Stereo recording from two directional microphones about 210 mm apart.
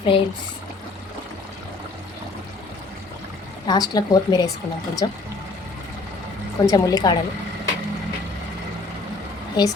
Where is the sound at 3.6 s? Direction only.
20° left (ahead or behind).